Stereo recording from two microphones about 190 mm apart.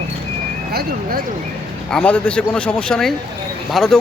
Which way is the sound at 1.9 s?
5° left (ahead or behind).